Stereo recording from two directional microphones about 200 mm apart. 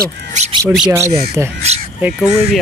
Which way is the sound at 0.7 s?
10° right (ahead or behind).